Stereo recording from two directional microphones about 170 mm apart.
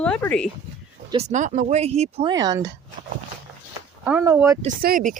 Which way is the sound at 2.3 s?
20° right (ahead or behind).